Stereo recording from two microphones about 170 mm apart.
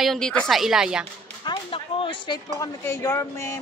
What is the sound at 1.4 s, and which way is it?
Speech, 30° left (ahead or behind).